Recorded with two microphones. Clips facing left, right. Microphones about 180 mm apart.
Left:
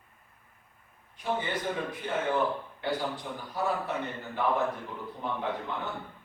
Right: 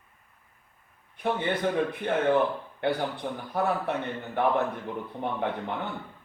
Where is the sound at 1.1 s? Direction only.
60° right (ahead or behind).